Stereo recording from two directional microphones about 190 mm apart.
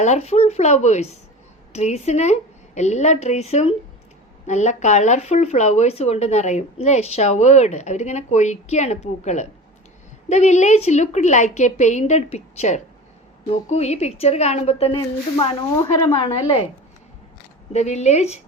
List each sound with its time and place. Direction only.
0.0 s speech: 35° left (ahead or behind)
17.7 s speech: 35° left (ahead or behind)